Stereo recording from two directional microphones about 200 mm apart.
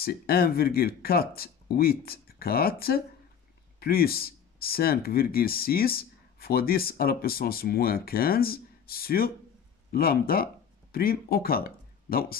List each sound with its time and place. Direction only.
0.0 s speech: 50° left (ahead or behind)